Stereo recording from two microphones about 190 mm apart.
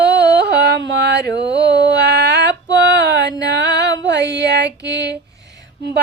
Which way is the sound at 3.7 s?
20° left (ahead or behind).